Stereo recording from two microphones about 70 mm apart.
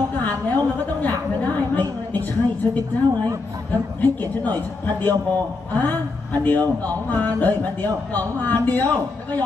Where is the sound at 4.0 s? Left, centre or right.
Left.